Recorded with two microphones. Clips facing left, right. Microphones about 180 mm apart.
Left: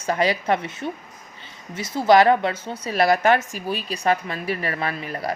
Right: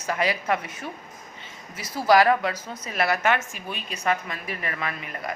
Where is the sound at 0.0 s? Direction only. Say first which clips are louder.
Left 4 dB; 30° left (ahead or behind).